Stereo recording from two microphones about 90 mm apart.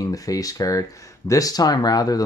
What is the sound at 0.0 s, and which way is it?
Speech, 40° left (ahead or behind).